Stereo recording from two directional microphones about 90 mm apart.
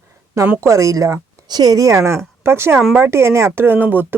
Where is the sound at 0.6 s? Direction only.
35° right (ahead or behind).